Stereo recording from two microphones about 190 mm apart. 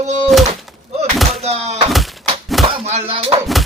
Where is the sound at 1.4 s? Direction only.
30° right (ahead or behind).